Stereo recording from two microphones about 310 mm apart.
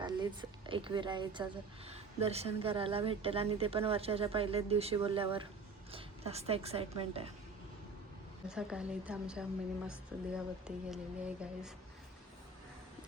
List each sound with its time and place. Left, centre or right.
0.0 s a woman's voice: centre
8.4 s a woman's voice: centre
10.9 s a woman's voice: centre